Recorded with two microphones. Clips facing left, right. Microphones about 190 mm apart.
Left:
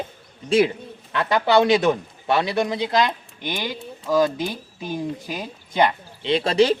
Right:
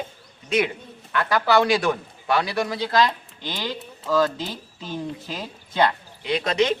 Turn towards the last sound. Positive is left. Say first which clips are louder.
# left 4 dB
turn(degrees=30)  # may be behind; listen again after turning